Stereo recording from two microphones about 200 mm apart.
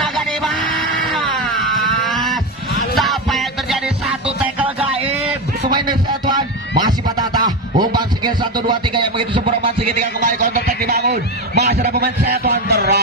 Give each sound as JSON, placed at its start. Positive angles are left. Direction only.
{"t": 0.0, "sound": "music", "side_deg": 0}
{"t": 2.0, "sound": "a sound", "side_deg": 0}
{"t": 3.0, "sound": "music", "side_deg": 0}
{"t": 5.7, "sound": "music", "side_deg": -20}
{"t": 6.8, "sound": "a sound", "side_deg": -20}
{"t": 7.8, "sound": "music", "side_deg": -20}
{"t": 9.8, "sound": "a man's voice", "side_deg": -40}